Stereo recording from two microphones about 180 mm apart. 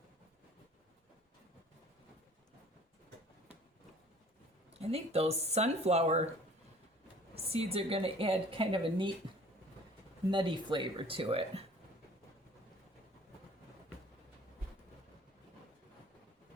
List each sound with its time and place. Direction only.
4.8 s a woman's voice: 35° right (ahead or behind)
7.3 s a woman's voice: 35° right (ahead or behind)
10.3 s speech: 25° right (ahead or behind)